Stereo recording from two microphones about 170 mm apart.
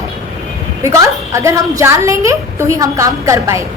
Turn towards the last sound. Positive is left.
turn(degrees=-15)  # may be behind; listen again after turning